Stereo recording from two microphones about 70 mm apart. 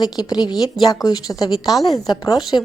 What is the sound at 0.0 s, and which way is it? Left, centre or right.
Speech, left.